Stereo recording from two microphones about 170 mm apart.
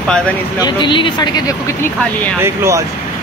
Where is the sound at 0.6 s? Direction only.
25° left (ahead or behind).